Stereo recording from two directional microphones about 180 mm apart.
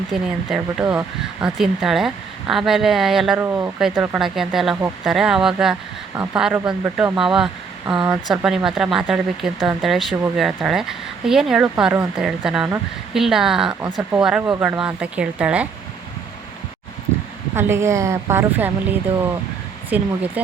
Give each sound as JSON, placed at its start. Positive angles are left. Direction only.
{"t": 0.1, "sound": "speech", "side_deg": -5}
{"t": 3.4, "sound": "a woman's voice", "side_deg": -10}
{"t": 3.8, "sound": "a woman's voice", "side_deg": 0}
{"t": 17.5, "sound": "a woman's voice", "side_deg": -15}